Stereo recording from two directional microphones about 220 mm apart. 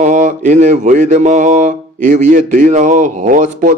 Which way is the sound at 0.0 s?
35° right (ahead or behind).